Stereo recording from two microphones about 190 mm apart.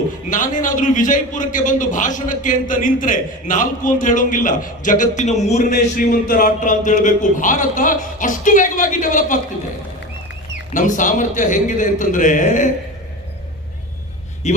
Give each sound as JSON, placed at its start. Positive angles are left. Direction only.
{"t": 0.3, "sound": "a man's voice", "side_deg": 45}
{"t": 5.8, "sound": "a man's voice", "side_deg": 45}
{"t": 10.8, "sound": "a man's voice", "side_deg": 45}
{"t": 14.4, "sound": "a man's voice", "side_deg": 35}